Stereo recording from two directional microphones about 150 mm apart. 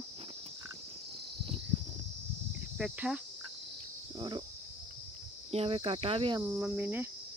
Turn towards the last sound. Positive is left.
turn(degrees=-10)  # may be behind; listen again after turning